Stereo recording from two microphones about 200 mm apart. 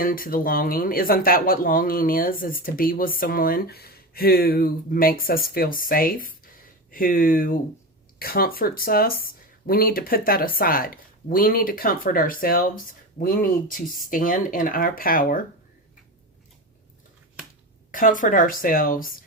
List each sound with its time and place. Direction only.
0.0 s speech: 45° left (ahead or behind)
17.9 s speech: 40° left (ahead or behind)